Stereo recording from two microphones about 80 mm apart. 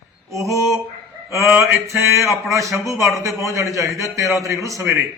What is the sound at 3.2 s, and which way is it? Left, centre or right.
A man's voice, right.